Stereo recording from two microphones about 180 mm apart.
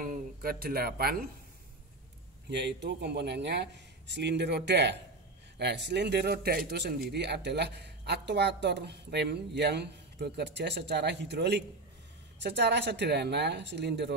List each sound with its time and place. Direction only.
0.4 s speech: 55° right (ahead or behind)
2.5 s a man's voice: 70° right (ahead or behind)